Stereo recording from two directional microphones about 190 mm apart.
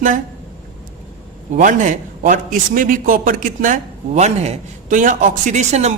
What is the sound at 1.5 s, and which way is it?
A man's voice, 45° right (ahead or behind).